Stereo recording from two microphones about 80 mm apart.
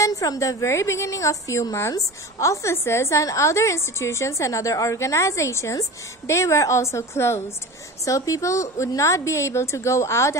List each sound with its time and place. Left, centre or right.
0.0 s a woman's voice: left